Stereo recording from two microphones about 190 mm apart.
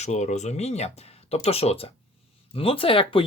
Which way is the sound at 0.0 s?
35° left (ahead or behind).